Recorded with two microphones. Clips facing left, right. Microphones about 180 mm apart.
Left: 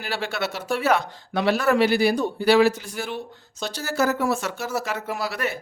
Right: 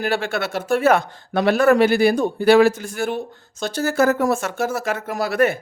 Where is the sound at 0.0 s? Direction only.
50° right (ahead or behind).